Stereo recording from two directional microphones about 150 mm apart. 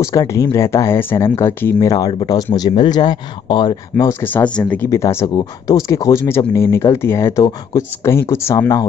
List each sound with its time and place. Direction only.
0.0 s speech: 20° left (ahead or behind)
4.0 s speech: 15° left (ahead or behind)